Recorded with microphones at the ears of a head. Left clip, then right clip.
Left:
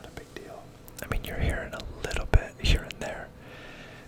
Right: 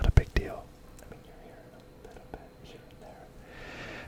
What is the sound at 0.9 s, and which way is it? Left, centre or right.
Whispering, left.